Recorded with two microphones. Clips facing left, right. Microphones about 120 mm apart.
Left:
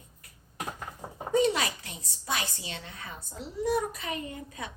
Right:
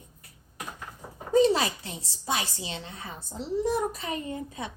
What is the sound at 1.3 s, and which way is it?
A woman's voice, 30° right (ahead or behind).